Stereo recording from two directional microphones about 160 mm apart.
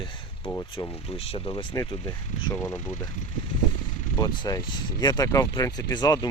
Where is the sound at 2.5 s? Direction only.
15° left (ahead or behind).